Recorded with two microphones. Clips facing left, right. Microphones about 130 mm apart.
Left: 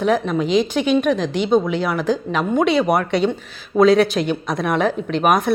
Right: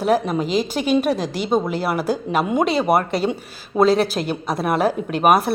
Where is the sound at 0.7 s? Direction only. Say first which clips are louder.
Left 2 dB; 40° right (ahead or behind).